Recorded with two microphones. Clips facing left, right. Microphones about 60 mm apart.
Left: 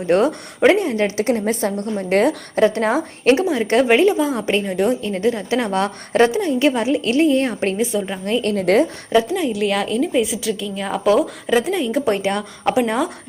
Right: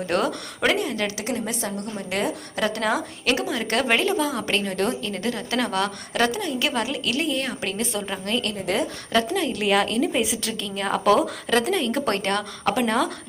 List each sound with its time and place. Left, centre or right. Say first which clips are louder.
0.1 s a woman's voice: left 9 dB; left
5.0 s a woman's voice: left 8 dB; left
7.8 s a woman's voice: left 7 dB; centre
8.2 s a woman's voice: left 4 dB; left
8.5 s a woman's voice: left 10 dB; left
9.1 s a woman's voice: left 5 dB; centre